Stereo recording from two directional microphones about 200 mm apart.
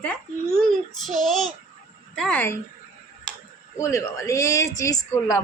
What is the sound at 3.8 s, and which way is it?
A woman's voice, 15° left (ahead or behind).